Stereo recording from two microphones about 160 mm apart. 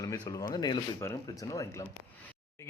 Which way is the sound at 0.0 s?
20° left (ahead or behind).